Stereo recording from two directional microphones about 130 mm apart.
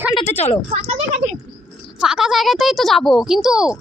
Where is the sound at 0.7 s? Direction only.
55° right (ahead or behind).